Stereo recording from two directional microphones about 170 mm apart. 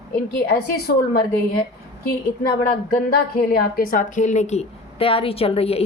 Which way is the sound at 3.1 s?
60° left (ahead or behind).